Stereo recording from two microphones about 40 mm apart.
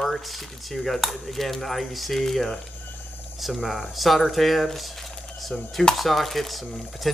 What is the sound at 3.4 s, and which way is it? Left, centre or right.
Speech, centre.